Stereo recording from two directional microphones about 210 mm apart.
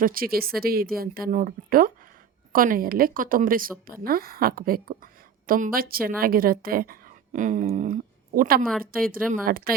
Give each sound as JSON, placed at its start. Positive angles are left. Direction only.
{"t": 0.0, "sound": "a woman's voice", "side_deg": -45}